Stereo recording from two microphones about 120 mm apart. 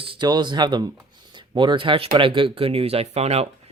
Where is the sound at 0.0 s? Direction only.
45° right (ahead or behind).